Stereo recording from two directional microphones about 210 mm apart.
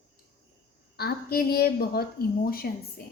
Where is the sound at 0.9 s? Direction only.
50° left (ahead or behind).